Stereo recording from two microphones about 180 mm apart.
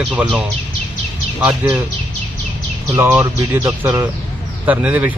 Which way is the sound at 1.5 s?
20° right (ahead or behind).